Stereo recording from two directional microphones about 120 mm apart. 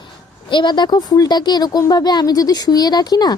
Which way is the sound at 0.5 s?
40° left (ahead or behind).